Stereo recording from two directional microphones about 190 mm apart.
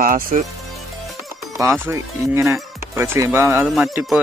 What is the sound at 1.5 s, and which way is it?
Speech, 15° right (ahead or behind).